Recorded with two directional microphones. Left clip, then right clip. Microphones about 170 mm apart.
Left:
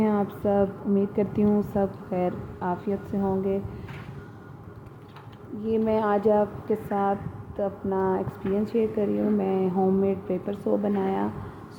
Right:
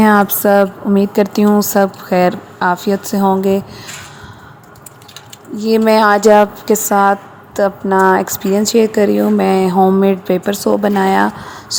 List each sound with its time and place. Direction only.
0.0 s a woman's voice: 50° right (ahead or behind)
5.6 s a woman's voice: 50° right (ahead or behind)